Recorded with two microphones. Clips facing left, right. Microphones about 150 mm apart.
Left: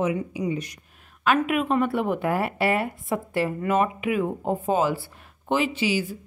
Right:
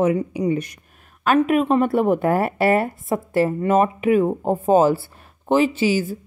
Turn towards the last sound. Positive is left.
turn(degrees=-40)  # may be behind; listen again after turning